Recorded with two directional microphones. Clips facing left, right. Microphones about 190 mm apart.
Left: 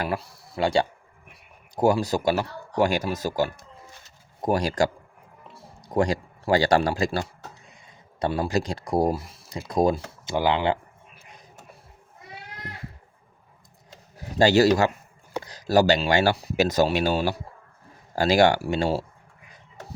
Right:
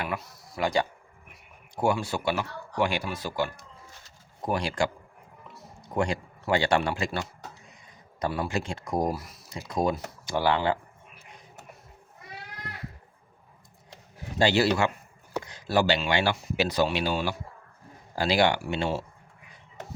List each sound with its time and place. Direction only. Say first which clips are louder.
0.0 s speech: left 4 dB; 35° left (ahead or behind)
10.2 s speech: left 2 dB; 20° left (ahead or behind)
14.3 s speech: left 5 dB; 40° left (ahead or behind)